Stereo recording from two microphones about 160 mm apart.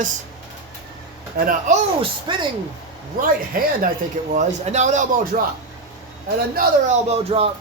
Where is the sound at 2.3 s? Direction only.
30° right (ahead or behind).